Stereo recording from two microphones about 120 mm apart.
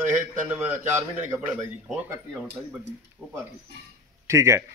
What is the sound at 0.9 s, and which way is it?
Speech, 20° right (ahead or behind).